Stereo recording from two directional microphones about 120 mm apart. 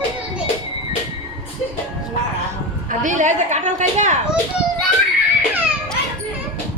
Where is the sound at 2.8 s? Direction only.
90° right.